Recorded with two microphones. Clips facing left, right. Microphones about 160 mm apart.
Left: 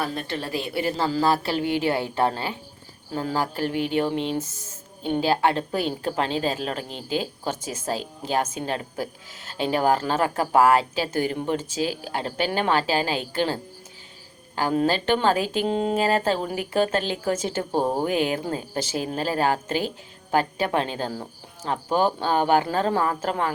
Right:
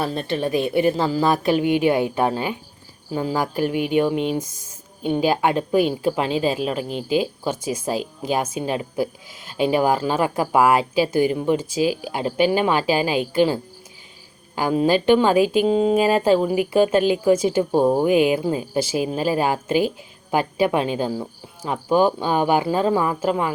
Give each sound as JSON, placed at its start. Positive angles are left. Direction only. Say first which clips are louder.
{"t": 0.0, "sound": "speech", "louder": "right 6 dB", "side_deg": -25}